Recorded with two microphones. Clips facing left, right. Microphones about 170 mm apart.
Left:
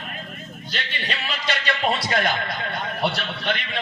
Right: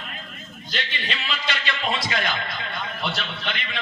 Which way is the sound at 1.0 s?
40° left (ahead or behind).